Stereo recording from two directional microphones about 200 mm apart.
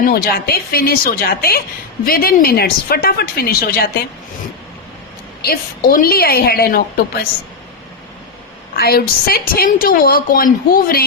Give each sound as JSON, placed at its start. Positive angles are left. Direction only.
{"t": 0.1, "sound": "a woman's voice", "side_deg": 50}
{"t": 5.4, "sound": "a woman's voice", "side_deg": 50}
{"t": 8.7, "sound": "a woman's voice", "side_deg": 50}